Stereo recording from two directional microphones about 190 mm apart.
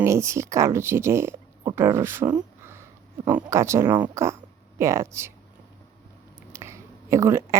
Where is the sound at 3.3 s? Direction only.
10° right (ahead or behind).